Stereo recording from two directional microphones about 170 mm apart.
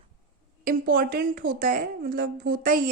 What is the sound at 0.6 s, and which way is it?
A woman's voice, 55° right (ahead or behind).